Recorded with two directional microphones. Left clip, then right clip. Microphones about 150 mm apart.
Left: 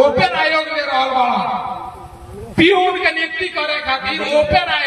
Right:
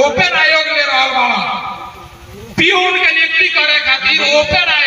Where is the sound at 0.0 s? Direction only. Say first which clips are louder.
Right 2 dB; 10° left (ahead or behind).